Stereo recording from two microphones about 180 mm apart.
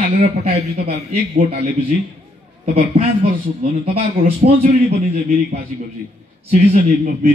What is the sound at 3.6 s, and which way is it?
Speech, 30° right (ahead or behind).